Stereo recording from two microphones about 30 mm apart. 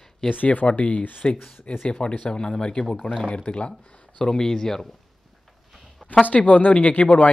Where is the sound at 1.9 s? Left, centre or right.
Left.